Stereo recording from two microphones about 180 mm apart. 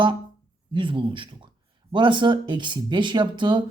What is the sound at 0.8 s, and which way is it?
Speech, 30° right (ahead or behind).